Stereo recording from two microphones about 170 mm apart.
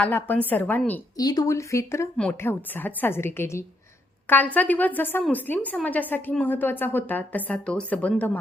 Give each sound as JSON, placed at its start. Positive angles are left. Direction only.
{"t": 0.0, "sound": "a woman's voice", "side_deg": 10}
{"t": 1.1, "sound": "a woman's voice", "side_deg": 20}